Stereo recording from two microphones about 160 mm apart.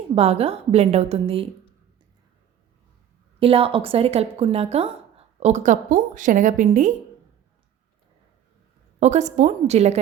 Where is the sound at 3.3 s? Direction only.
35° right (ahead or behind).